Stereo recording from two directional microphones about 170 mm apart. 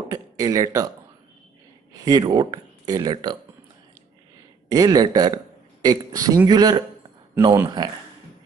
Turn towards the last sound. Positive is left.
turn(degrees=-25)  # may be behind; listen again after turning